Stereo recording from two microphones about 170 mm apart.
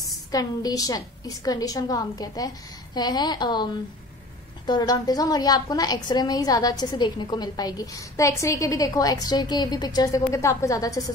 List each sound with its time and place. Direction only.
0.3 s a woman's voice: 20° left (ahead or behind)